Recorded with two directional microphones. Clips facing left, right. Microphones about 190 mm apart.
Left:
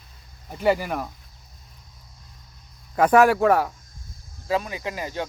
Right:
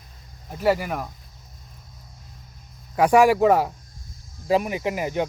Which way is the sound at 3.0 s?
10° right (ahead or behind).